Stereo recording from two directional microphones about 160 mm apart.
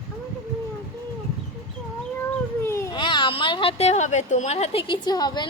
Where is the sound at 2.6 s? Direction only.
15° left (ahead or behind).